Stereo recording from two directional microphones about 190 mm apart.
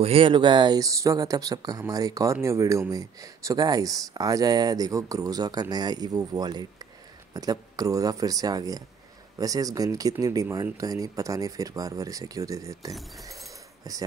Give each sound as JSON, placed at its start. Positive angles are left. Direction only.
{"t": 0.0, "sound": "speech", "side_deg": -30}